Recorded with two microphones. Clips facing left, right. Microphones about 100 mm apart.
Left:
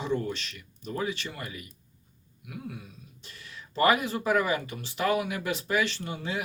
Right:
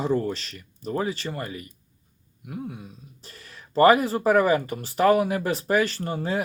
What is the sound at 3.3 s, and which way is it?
Speech, 40° right (ahead or behind).